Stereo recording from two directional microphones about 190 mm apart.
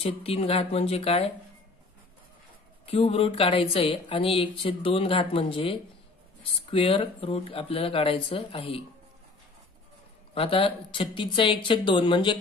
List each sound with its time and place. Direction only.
0.0 s speech: 30° left (ahead or behind)
2.9 s speech: 30° left (ahead or behind)
10.3 s speech: 30° left (ahead or behind)